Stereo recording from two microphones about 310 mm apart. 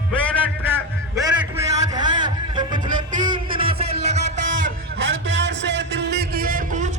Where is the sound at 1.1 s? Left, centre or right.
Centre.